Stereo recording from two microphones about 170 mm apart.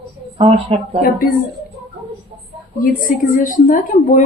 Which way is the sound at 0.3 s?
35° right (ahead or behind).